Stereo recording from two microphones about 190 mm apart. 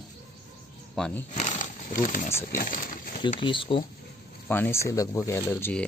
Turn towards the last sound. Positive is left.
turn(degrees=10)  # may be behind; listen again after turning